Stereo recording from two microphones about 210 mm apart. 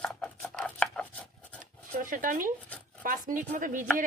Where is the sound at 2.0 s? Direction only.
40° right (ahead or behind).